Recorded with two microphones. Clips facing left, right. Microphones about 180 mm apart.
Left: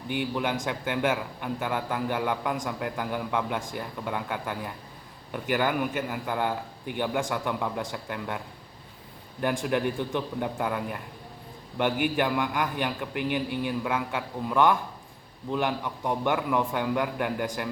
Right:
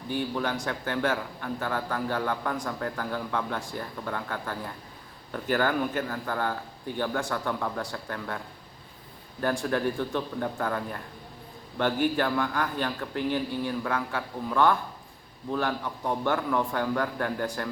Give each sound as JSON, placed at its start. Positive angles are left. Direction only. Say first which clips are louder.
{"t": 0.1, "sound": "a man's voice", "louder": "left 1 dB", "side_deg": 15}
{"t": 9.4, "sound": "a man's voice", "louder": "even", "side_deg": 15}
{"t": 16.2, "sound": "a man's voice", "louder": "left 1 dB", "side_deg": 15}